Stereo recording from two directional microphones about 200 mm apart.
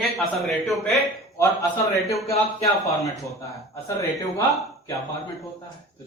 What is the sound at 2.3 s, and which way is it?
Speech, 30° left (ahead or behind).